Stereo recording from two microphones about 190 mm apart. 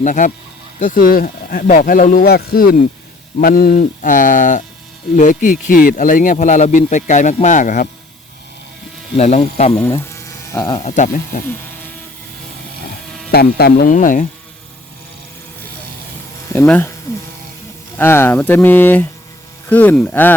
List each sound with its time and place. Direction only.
0.0 s a man's voice: 40° left (ahead or behind)
9.1 s a man's voice: 35° left (ahead or behind)
10.1 s electric toothbrush: 15° left (ahead or behind)
10.8 s a man's voice: 40° left (ahead or behind)
13.3 s speech: 55° left (ahead or behind)
16.5 s speech: 10° left (ahead or behind)
17.9 s speech: 10° left (ahead or behind)